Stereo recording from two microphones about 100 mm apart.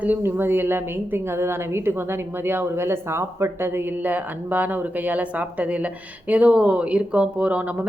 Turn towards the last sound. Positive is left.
turn(degrees=-15)  # may be behind; listen again after turning